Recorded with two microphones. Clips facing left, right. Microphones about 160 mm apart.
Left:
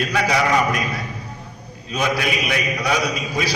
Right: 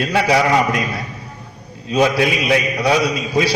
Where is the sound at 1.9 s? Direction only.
30° right (ahead or behind).